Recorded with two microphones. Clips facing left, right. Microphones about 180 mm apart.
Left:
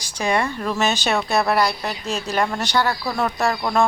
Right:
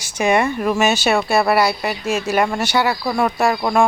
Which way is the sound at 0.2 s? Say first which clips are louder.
Right 5 dB; 10° right (ahead or behind).